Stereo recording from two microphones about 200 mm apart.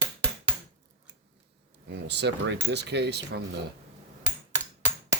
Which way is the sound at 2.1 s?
60° right (ahead or behind).